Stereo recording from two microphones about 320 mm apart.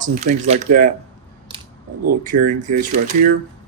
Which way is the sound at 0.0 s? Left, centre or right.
Right.